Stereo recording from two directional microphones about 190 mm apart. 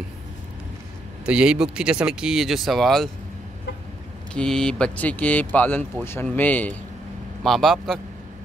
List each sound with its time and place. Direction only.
1.2 s speech: 5° right (ahead or behind)
4.3 s speech: 5° left (ahead or behind)